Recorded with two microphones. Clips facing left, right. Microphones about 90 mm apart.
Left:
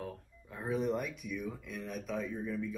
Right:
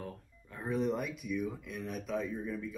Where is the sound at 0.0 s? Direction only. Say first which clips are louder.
Left 1 dB; centre (ahead or behind).